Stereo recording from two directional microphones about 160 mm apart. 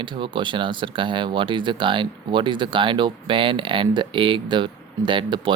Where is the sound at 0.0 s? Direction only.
30° right (ahead or behind).